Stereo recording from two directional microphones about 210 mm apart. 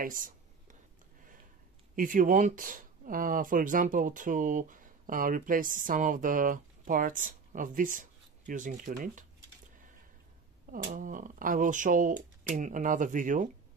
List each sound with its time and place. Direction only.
0.0 s a sound: 40° right (ahead or behind)
2.0 s speech: 40° right (ahead or behind)
10.7 s speech: 40° right (ahead or behind)